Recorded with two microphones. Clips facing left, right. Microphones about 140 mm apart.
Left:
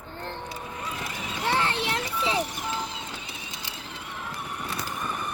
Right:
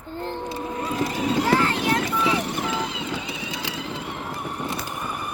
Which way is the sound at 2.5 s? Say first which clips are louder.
Right 6 dB; 90° right.